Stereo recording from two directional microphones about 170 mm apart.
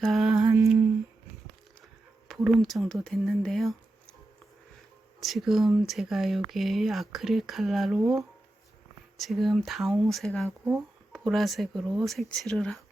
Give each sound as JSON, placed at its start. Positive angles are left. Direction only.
{"t": 0.0, "sound": "lullaby", "side_deg": 0}
{"t": 0.4, "sound": "humming", "side_deg": -20}
{"t": 2.2, "sound": "speech", "side_deg": 0}
{"t": 5.2, "sound": "speech", "side_deg": 0}
{"t": 9.1, "sound": "speech", "side_deg": 0}